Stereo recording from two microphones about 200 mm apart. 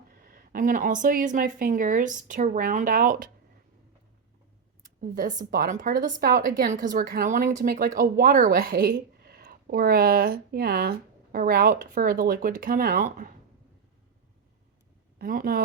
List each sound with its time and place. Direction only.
0.3 s speech: 45° right (ahead or behind)
4.8 s speech: 45° right (ahead or behind)
15.2 s speech: 45° right (ahead or behind)